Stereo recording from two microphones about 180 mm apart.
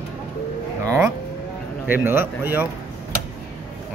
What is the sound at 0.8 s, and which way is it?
Speech, 15° right (ahead or behind).